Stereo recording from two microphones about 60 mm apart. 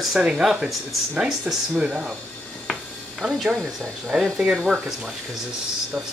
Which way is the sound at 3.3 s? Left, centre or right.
Centre.